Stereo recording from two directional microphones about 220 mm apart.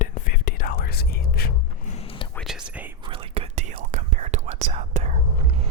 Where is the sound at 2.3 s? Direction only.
Centre (ahead or behind).